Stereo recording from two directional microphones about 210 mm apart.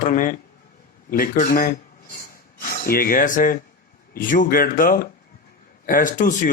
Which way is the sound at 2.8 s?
45° left (ahead or behind).